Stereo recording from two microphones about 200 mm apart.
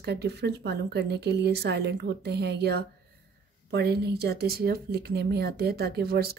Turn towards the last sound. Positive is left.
turn(degrees=-50)  # may be behind; listen again after turning